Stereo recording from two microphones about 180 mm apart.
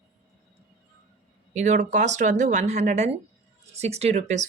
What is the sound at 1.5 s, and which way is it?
Speech, 40° right (ahead or behind).